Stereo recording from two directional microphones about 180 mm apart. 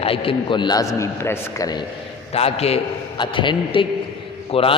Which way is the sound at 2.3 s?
35° left (ahead or behind).